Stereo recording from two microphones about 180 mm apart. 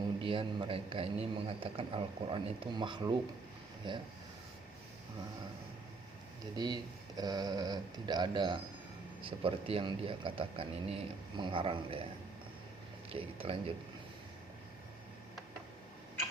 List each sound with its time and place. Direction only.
0.2 s a man's voice: 30° right (ahead or behind)
7.2 s a man's voice: 20° right (ahead or behind)
13.1 s speech: 30° right (ahead or behind)